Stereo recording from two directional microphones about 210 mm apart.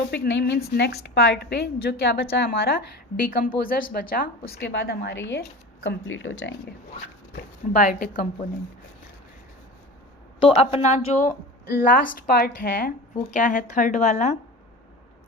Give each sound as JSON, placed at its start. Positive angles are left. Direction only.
{"t": 0.1, "sound": "a woman's voice", "side_deg": 60}
{"t": 7.7, "sound": "a woman's voice", "side_deg": 40}
{"t": 10.4, "sound": "a woman's voice", "side_deg": 30}
{"t": 11.7, "sound": "a woman's voice", "side_deg": 45}